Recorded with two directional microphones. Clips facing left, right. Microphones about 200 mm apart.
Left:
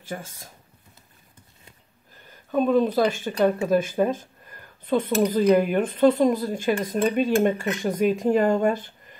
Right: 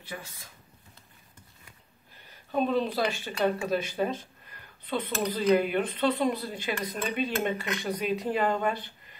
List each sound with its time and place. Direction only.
0.0 s speech: 45° left (ahead or behind)
2.1 s speech: 45° left (ahead or behind)